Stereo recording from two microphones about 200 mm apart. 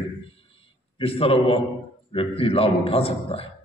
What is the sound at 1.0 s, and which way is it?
A man's voice, 30° left (ahead or behind).